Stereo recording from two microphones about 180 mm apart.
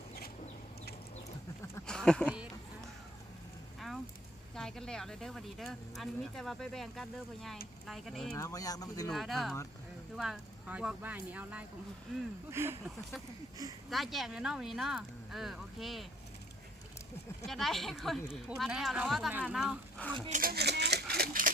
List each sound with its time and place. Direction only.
1.9 s a sound: 5° left (ahead or behind)
2.3 s a sound: 5° right (ahead or behind)
4.5 s speech: 5° left (ahead or behind)
8.4 s speech: 20° left (ahead or behind)
9.0 s speech: centre (ahead or behind)
13.9 s speech: centre (ahead or behind)
17.4 s speech: centre (ahead or behind)
20.3 s speech: 55° right (ahead or behind)